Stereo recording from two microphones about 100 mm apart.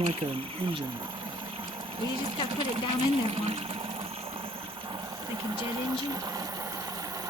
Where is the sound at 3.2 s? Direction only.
75° right (ahead or behind).